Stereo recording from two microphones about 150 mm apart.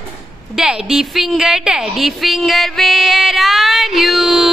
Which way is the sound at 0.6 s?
5° right (ahead or behind).